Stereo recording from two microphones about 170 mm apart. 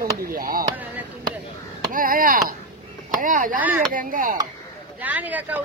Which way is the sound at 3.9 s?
55° right (ahead or behind).